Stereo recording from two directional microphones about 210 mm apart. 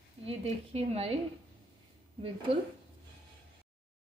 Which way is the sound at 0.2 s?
30° right (ahead or behind).